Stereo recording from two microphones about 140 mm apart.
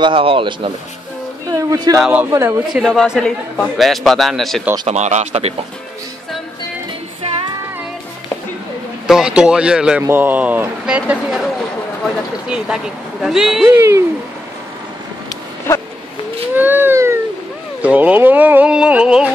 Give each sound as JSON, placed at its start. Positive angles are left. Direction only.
{"t": 0.0, "sound": "speech", "side_deg": -40}
{"t": 1.5, "sound": "speech", "side_deg": -25}
{"t": 2.0, "sound": "a man's voice", "side_deg": -10}
{"t": 4.8, "sound": "speech", "side_deg": -55}
{"t": 9.0, "sound": "a man's voice", "side_deg": -5}
{"t": 13.7, "sound": "speech", "side_deg": -20}
{"t": 16.5, "sound": "a sound", "side_deg": -15}
{"t": 17.8, "sound": "speech", "side_deg": -10}